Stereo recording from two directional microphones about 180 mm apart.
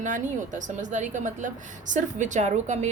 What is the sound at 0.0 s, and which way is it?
A woman's voice, 45° right (ahead or behind).